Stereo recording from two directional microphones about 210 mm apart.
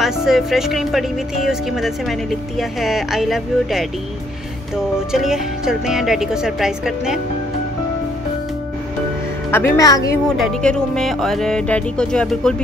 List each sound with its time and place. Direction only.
0.0 s music: centre (ahead or behind)
5.1 s music: centre (ahead or behind)
9.5 s a woman's voice: 15° left (ahead or behind)
10.2 s music: centre (ahead or behind)